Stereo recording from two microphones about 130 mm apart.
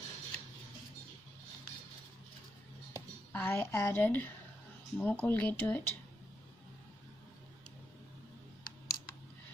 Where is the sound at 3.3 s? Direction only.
15° left (ahead or behind).